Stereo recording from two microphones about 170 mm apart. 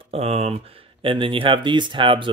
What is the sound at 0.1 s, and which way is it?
Speech, 35° right (ahead or behind).